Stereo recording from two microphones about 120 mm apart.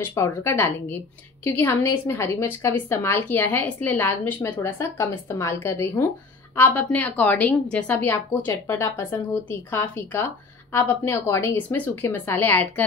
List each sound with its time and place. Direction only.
0.0 s a woman's voice: 25° left (ahead or behind)